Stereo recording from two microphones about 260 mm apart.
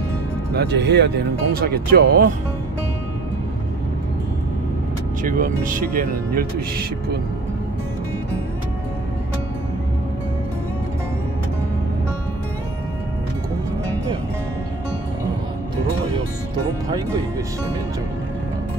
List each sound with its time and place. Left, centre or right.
0.6 s speech: right
5.2 s speech: right